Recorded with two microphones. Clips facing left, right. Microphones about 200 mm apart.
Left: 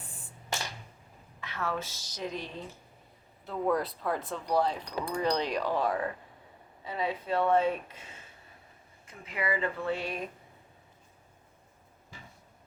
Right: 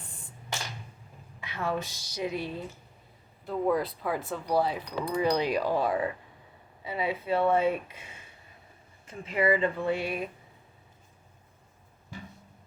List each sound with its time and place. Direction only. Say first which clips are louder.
1.4 s speech: right 3 dB; 15° right (ahead or behind)
9.0 s speech: right 7 dB; 25° right (ahead or behind); by 10.2 s 10° right (ahead or behind)